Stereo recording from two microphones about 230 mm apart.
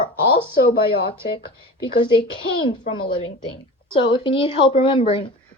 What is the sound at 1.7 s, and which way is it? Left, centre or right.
A woman's voice, left.